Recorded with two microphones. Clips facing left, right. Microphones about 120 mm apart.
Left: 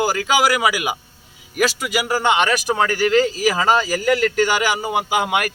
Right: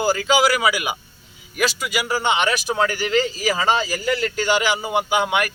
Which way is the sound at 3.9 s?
55° left (ahead or behind).